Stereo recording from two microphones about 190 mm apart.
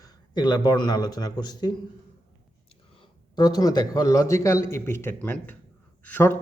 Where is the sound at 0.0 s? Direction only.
20° left (ahead or behind).